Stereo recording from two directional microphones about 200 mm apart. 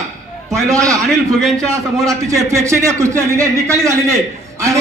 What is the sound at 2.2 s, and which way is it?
A man's voice, 15° right (ahead or behind).